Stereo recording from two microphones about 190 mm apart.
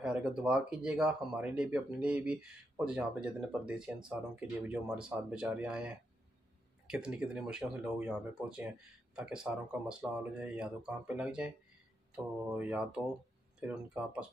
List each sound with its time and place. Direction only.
0.0 s speech: 5° right (ahead or behind)
12.5 s speech: 5° right (ahead or behind)